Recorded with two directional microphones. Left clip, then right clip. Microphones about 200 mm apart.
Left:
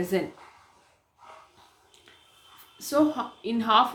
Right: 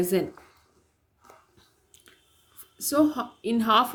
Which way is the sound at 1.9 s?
45° right (ahead or behind).